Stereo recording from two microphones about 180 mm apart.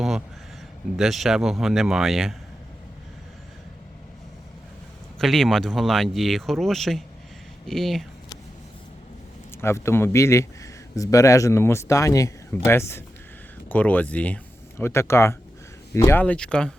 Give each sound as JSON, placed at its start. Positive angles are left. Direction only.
{"t": 0.9, "sound": "speech", "side_deg": 0}
{"t": 5.2, "sound": "speech", "side_deg": 0}
{"t": 9.6, "sound": "a man's voice", "side_deg": 15}